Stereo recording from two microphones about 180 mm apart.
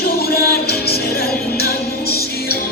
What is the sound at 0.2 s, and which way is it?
Music, 60° left (ahead or behind).